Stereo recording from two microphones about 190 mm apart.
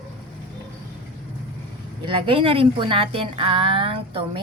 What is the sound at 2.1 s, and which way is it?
A woman's voice, 25° right (ahead or behind).